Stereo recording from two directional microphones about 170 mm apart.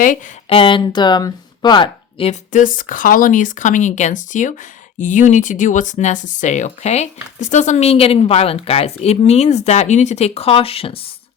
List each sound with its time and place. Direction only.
0.4 s speech: 30° left (ahead or behind)
2.5 s speech: 50° left (ahead or behind); by 11.0 s 35° left (ahead or behind)